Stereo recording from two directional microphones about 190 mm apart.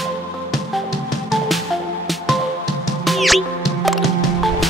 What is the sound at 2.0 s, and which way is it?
Music, centre (ahead or behind).